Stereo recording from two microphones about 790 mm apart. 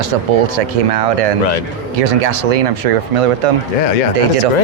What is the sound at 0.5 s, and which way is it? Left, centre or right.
Speech, right.